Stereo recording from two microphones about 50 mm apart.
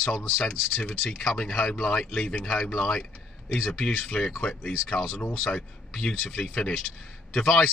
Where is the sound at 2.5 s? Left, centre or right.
Centre.